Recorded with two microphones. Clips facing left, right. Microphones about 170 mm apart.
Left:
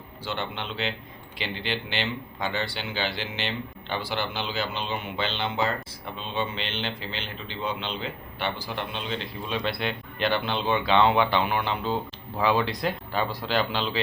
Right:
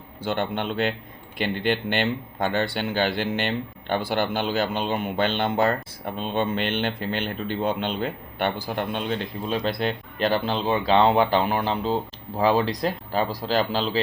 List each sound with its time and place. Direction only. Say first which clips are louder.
0.2 s speech: right 7 dB; 50° right (ahead or behind)